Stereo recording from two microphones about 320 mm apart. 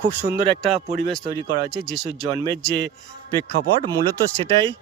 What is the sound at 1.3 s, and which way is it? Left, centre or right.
A man's voice, centre.